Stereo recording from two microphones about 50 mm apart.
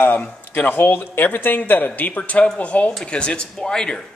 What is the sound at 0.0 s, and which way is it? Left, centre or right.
A man's voice, left.